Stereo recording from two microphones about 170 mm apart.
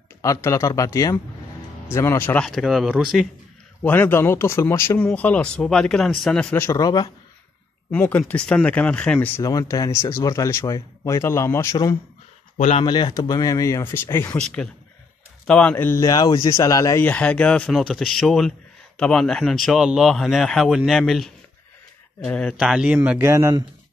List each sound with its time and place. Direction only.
0.2 s speech: 20° left (ahead or behind); by 3.3 s 5° right (ahead or behind)
3.8 s speech: 10° left (ahead or behind)
7.9 s speech: 10° left (ahead or behind)
9.4 s speech: 20° left (ahead or behind)
12.5 s a man's voice: 35° left (ahead or behind); by 15.7 s 5° left (ahead or behind)
15.7 s speech: 15° left (ahead or behind); by 23.6 s 15° right (ahead or behind)